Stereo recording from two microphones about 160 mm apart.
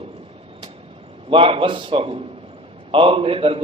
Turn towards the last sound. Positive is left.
turn(degrees=-35)  # may be behind; listen again after turning